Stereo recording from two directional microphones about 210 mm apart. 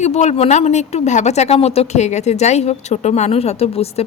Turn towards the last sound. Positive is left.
turn(degrees=30)  # may be behind; listen again after turning